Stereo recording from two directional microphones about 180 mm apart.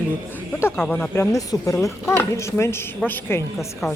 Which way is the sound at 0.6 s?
10° left (ahead or behind).